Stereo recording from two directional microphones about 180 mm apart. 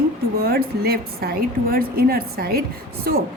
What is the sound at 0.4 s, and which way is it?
A woman's voice, 60° right (ahead or behind).